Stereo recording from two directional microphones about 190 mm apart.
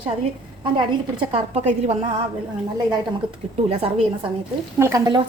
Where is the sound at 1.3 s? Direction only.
35° right (ahead or behind).